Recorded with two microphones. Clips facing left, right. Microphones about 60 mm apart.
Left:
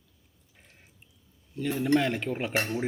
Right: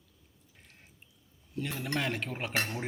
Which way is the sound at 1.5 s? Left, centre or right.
Centre.